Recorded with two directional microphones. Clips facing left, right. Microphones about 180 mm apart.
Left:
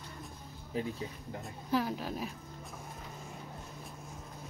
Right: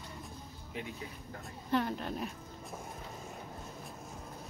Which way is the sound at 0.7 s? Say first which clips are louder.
Left 7 dB; 35° left (ahead or behind).